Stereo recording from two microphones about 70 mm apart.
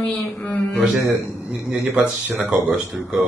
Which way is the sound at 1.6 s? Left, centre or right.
Centre.